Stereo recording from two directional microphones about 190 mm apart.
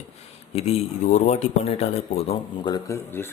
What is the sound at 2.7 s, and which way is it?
Speech, 15° left (ahead or behind).